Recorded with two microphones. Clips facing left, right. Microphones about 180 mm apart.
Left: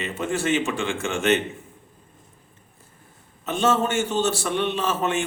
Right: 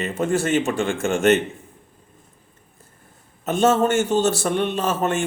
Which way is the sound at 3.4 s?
45° right (ahead or behind).